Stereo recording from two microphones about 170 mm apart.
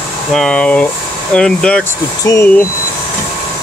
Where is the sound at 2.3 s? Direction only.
20° left (ahead or behind).